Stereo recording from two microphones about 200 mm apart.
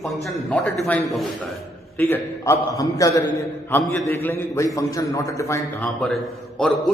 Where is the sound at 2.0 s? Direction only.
10° left (ahead or behind).